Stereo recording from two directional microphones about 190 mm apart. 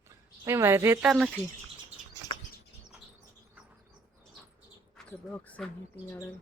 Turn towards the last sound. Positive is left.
turn(degrees=5)  # may be behind; listen again after turning